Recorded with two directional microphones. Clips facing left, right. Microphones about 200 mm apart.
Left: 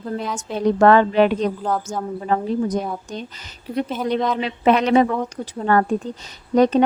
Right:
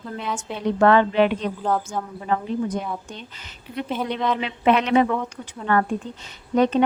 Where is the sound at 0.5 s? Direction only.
40° left (ahead or behind).